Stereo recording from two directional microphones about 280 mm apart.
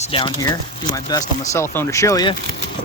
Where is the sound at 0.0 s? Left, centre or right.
Centre.